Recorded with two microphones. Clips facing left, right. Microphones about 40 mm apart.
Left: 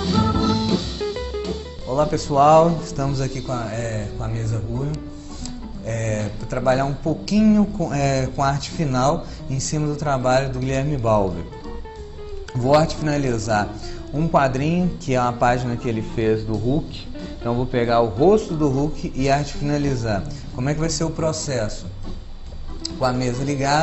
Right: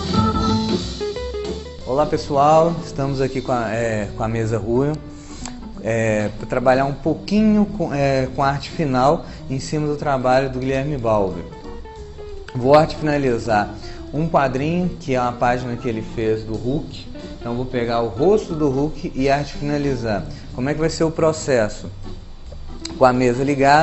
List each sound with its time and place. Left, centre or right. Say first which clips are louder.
0.0 s music: right 1 dB; centre
1.9 s a man's voice: right 2 dB; centre
3.3 s a man's voice: right 6 dB; right; by 11.4 s centre
12.5 s a man's voice: right 4 dB; centre
21.2 s speech: right 8 dB; right
22.8 s speech: right 7 dB; right